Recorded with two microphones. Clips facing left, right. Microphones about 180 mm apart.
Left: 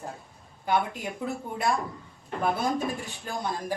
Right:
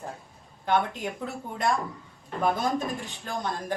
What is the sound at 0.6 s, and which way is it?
Speech, 5° left (ahead or behind).